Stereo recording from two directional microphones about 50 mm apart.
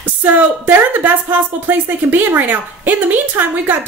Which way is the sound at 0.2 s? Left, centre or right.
Right.